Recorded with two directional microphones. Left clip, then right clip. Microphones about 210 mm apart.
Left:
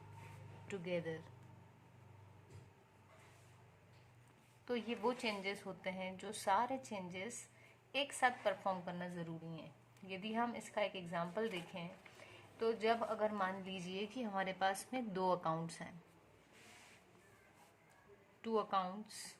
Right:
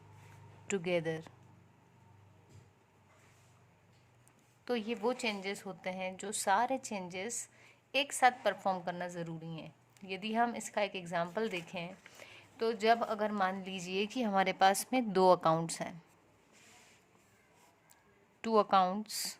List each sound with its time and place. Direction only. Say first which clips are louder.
0.7 s speech: right 9 dB; 45° right (ahead or behind)
4.6 s a woman's voice: right 5 dB; 35° right (ahead or behind)
18.4 s speech: right 10 dB; 50° right (ahead or behind)